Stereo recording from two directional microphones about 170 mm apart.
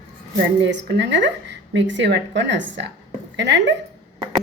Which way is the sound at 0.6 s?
90° right.